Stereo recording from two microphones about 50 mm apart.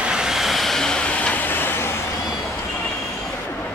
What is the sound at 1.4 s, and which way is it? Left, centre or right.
Vehicle, left.